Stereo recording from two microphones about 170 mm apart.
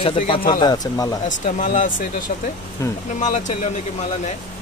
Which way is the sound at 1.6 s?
50° left (ahead or behind).